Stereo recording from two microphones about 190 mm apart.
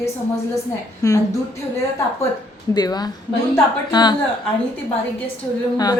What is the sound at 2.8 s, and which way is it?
Speech, 20° left (ahead or behind).